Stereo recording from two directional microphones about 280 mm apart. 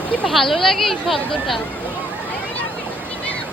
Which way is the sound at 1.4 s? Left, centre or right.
Centre.